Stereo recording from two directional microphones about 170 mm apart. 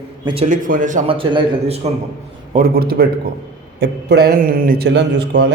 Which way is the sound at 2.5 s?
60° right (ahead or behind).